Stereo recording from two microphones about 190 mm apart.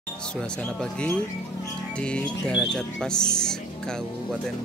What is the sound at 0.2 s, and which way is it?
Speech, 5° left (ahead or behind).